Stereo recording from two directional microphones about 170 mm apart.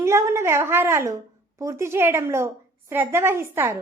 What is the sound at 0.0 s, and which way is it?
A woman's voice, 15° right (ahead or behind).